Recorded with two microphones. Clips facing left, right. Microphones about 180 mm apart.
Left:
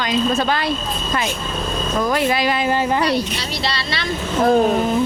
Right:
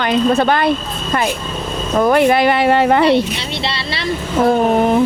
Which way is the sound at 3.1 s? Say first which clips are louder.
Right 6 dB; 25° right (ahead or behind).